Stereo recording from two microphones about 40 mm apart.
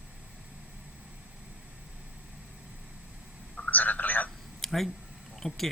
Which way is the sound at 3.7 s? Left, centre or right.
Left.